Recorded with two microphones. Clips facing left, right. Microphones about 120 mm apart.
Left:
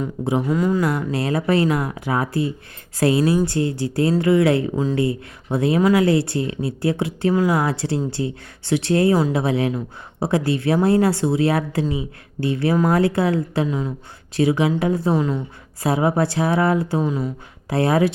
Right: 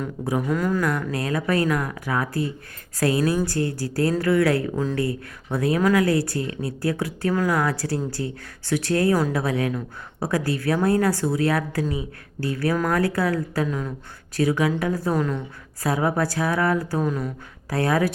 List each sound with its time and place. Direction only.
0.0 s speech: 25° left (ahead or behind)
0.9 s speech: 30° left (ahead or behind)